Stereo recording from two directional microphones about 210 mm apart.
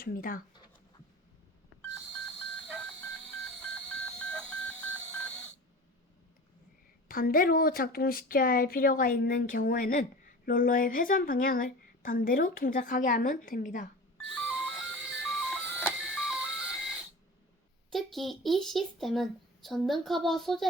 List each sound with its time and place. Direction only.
0.0 s speech: 45° left (ahead or behind)
4.0 s telephone dialing: 5° left (ahead or behind)
7.1 s speech: 45° left (ahead or behind)
14.3 s a sound: centre (ahead or behind)
17.9 s speech: centre (ahead or behind)